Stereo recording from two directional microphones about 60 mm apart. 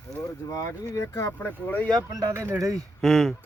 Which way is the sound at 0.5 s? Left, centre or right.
Left.